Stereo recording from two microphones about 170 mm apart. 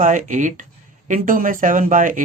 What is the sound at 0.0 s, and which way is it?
Speech, 50° right (ahead or behind).